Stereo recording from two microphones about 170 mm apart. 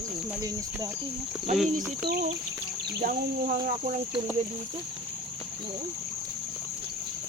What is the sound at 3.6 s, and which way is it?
Speech, 50° right (ahead or behind).